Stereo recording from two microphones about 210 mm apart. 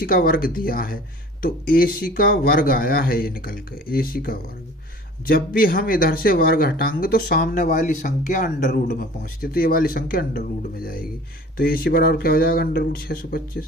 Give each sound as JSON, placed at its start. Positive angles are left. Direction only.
{"t": 0.0, "sound": "speech", "side_deg": 45}